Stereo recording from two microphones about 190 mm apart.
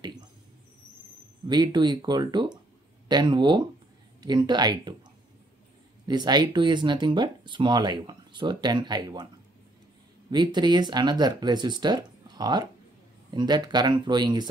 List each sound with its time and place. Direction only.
1.5 s speech: 20° right (ahead or behind)
6.0 s speech: 20° right (ahead or behind)
10.3 s speech: 25° right (ahead or behind)